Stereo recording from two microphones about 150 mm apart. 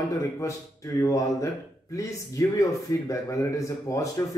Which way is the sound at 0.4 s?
20° left (ahead or behind).